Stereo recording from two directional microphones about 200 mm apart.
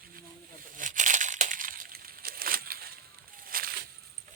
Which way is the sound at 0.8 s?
40° right (ahead or behind).